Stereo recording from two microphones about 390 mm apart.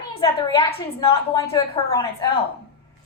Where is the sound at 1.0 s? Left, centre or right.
Centre.